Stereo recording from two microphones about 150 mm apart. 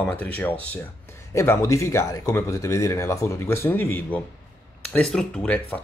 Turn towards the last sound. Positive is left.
turn(degrees=10)  # may be behind; listen again after turning